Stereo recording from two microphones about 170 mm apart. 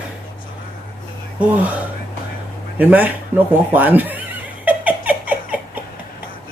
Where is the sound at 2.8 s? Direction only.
10° right (ahead or behind).